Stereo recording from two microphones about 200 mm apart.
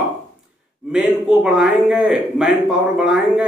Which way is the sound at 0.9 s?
Centre (ahead or behind).